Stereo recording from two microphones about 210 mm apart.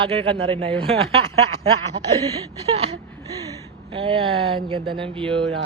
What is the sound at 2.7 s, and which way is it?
Gasp, 30° right (ahead or behind).